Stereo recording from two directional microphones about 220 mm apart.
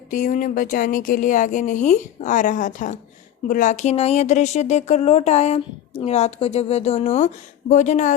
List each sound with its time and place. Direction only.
0.1 s a woman's voice: 35° left (ahead or behind)